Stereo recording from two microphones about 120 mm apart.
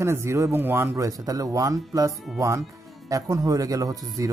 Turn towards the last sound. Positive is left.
turn(degrees=-30)  # may be behind; listen again after turning